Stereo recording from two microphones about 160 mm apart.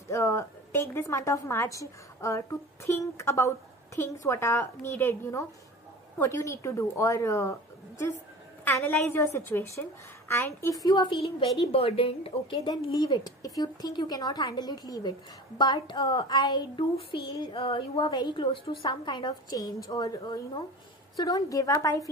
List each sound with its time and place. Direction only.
0.1 s a woman's voice: 20° left (ahead or behind)
8.6 s a woman's voice: 10° left (ahead or behind); by 11.1 s 25° left (ahead or behind)
11.6 s speech: 40° left (ahead or behind); by 22.1 s 20° left (ahead or behind)